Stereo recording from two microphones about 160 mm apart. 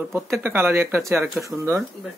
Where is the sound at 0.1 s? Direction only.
15° right (ahead or behind).